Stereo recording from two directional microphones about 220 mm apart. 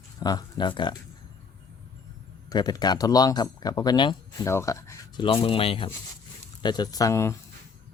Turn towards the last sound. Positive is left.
turn(degrees=15)  # may be behind; listen again after turning